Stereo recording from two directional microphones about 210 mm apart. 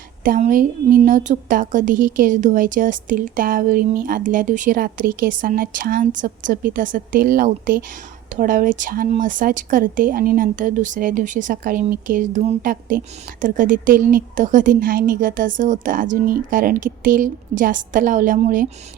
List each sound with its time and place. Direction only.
0.3 s a woman's voice: 40° right (ahead or behind)